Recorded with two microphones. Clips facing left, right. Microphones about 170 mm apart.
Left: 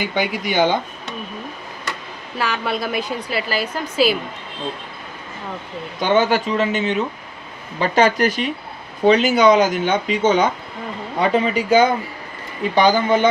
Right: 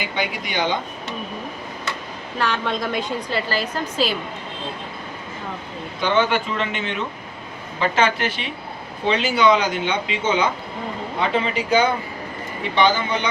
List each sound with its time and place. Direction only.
0.0 s speech: 45° left (ahead or behind)
2.4 s a woman's voice: 5° left (ahead or behind)
6.0 s a man's voice: 45° left (ahead or behind)